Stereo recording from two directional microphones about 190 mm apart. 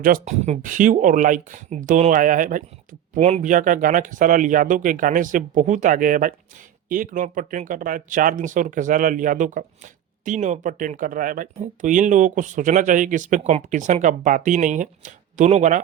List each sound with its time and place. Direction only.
0.0 s speech: 40° right (ahead or behind)